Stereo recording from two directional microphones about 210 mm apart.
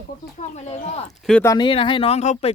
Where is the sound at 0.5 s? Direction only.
30° left (ahead or behind).